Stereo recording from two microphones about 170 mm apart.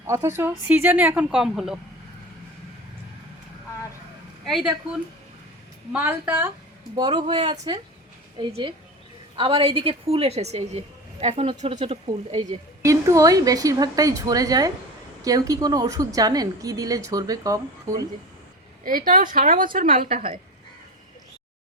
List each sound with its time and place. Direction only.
0.1 s a woman's voice: 15° right (ahead or behind)
4.4 s a woman's voice: centre (ahead or behind)
5.9 s a woman's voice: 10° right (ahead or behind)
6.9 s a woman's voice: 25° right (ahead or behind)
12.8 s a woman's voice: 20° right (ahead or behind)
18.9 s a woman's voice: 55° right (ahead or behind)
20.1 s a woman's voice: 35° right (ahead or behind)